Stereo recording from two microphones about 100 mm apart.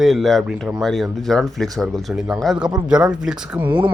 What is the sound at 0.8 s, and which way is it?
Speech, centre (ahead or behind).